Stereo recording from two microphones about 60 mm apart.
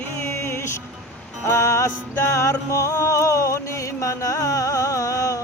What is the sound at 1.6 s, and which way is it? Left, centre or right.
Music, left.